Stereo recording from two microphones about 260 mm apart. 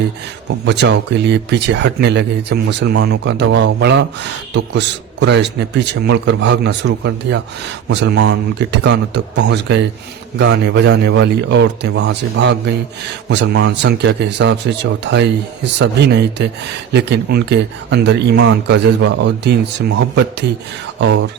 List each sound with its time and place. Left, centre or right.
0.6 s a man's voice: right
21.0 s a man's voice: right